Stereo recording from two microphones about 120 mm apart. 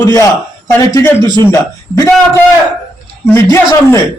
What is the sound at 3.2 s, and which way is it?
Speech, 25° left (ahead or behind).